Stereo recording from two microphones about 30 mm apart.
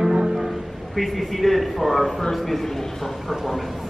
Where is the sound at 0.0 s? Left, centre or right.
Centre.